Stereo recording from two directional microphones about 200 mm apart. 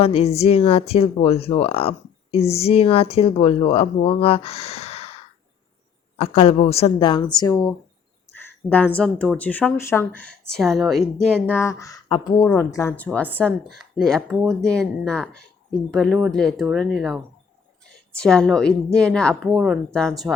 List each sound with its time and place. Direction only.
0.0 s speech: 30° left (ahead or behind)
6.1 s a woman's voice: 30° left (ahead or behind); by 17.2 s centre (ahead or behind)
18.2 s a woman's voice: 5° left (ahead or behind)